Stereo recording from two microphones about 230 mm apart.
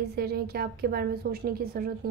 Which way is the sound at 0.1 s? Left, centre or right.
Right.